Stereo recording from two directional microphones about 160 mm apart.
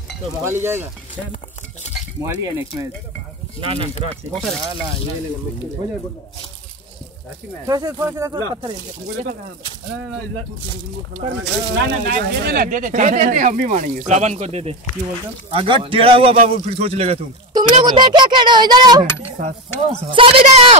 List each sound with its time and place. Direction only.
0.4 s speech: 15° right (ahead or behind)
3.6 s a man's voice: 35° right (ahead or behind)
4.1 s speech: 5° left (ahead or behind)
7.6 s speech: 20° right (ahead or behind)
11.7 s a man's voice: 70° right (ahead or behind); by 17.2 s 40° right (ahead or behind)
17.8 s speech: 25° right (ahead or behind)
20.1 s a man's voice: 35° right (ahead or behind)